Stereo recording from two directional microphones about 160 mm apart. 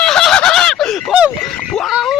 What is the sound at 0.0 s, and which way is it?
Fowl, 5° left (ahead or behind).